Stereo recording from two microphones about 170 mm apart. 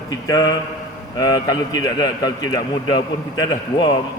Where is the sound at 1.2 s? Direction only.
25° left (ahead or behind).